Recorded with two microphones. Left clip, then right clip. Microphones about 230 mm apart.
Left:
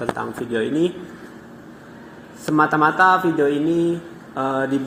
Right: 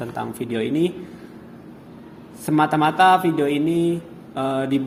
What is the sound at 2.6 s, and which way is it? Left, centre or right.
Mantra, right.